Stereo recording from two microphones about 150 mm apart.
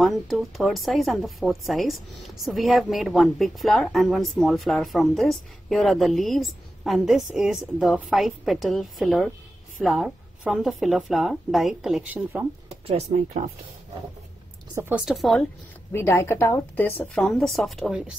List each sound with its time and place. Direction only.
0.0 s a woman's voice: centre (ahead or behind)
12.8 s speech: 45° right (ahead or behind)
14.8 s speech: 15° right (ahead or behind)
15.0 s a woman's voice: centre (ahead or behind)
15.9 s speech: 15° left (ahead or behind); by 18.1 s centre (ahead or behind)